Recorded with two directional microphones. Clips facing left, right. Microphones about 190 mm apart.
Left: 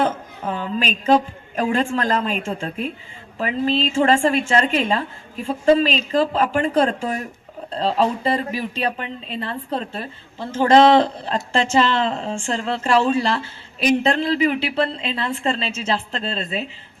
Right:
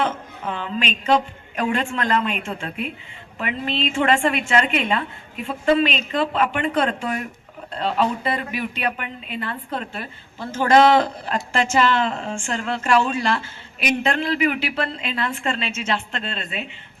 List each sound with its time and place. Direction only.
0.0 s speech: 35° left (ahead or behind)